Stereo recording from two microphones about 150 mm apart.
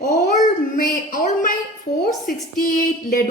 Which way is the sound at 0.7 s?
65° left (ahead or behind).